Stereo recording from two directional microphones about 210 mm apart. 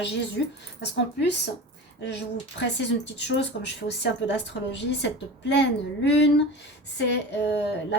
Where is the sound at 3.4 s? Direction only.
55° left (ahead or behind).